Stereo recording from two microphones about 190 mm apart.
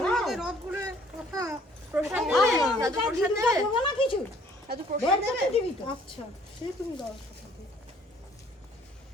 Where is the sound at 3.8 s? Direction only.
25° left (ahead or behind).